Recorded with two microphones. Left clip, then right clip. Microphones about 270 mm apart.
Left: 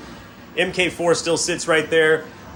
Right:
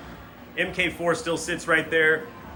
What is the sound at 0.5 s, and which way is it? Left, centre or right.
A man's voice, centre.